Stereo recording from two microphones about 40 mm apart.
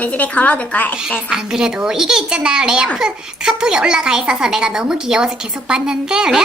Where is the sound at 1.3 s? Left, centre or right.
Centre.